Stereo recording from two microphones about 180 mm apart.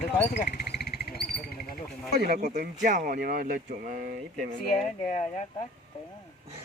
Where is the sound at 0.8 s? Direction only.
60° left (ahead or behind).